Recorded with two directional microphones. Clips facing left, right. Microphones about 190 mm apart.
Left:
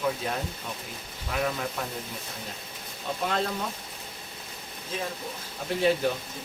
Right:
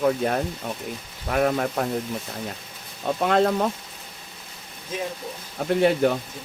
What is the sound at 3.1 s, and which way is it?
Speech, 60° right (ahead or behind).